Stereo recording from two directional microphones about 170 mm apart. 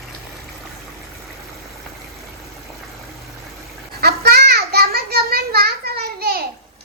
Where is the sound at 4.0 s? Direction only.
70° right (ahead or behind).